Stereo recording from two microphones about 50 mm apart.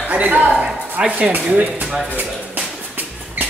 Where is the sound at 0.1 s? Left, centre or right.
Right.